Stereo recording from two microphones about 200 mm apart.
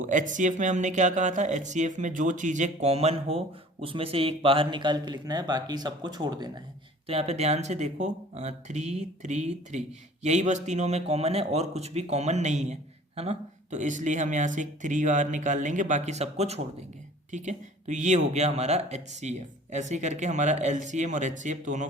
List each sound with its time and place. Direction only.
0.0 s speech: 40° right (ahead or behind); by 6.6 s 20° right (ahead or behind)
7.1 s speech: 30° right (ahead or behind)